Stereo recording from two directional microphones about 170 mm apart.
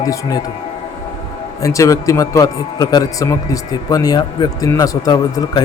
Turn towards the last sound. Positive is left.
turn(degrees=25)  # may be behind; listen again after turning